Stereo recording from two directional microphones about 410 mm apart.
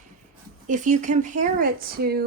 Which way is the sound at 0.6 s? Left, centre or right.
Centre.